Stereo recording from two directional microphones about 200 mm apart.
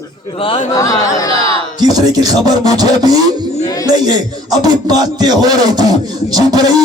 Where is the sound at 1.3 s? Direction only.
25° right (ahead or behind).